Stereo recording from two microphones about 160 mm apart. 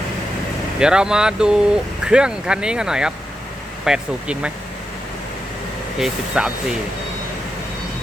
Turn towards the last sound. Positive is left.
turn(degrees=-5)  # may be behind; listen again after turning